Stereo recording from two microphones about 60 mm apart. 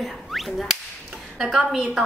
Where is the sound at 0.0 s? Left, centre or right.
Centre.